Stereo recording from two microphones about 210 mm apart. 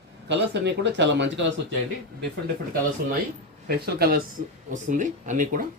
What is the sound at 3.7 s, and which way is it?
Speech, 50° right (ahead or behind).